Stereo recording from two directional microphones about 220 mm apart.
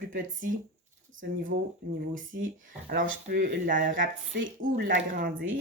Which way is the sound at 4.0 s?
55° right (ahead or behind).